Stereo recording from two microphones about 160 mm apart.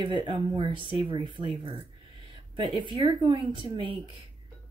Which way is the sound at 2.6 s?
30° right (ahead or behind).